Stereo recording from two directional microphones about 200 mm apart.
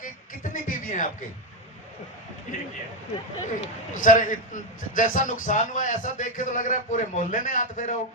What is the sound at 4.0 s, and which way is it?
A man's voice, 40° left (ahead or behind).